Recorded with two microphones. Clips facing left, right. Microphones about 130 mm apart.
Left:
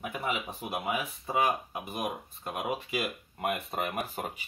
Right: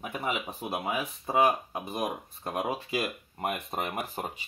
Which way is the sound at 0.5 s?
40° right (ahead or behind).